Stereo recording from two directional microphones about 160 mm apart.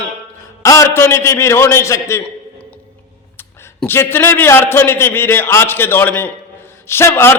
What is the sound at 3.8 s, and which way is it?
A man's voice, 15° left (ahead or behind).